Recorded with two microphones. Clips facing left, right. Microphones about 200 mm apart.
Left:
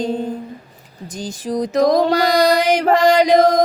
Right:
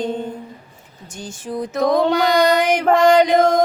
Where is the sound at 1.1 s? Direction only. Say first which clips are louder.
Left 4 dB; 35° left (ahead or behind).